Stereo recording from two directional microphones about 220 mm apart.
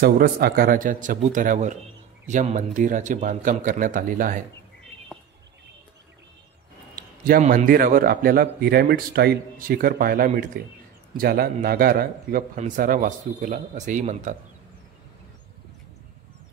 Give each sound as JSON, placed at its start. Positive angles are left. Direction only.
{"t": 0.0, "sound": "a man's voice", "side_deg": -45}
{"t": 7.0, "sound": "a man's voice", "side_deg": -40}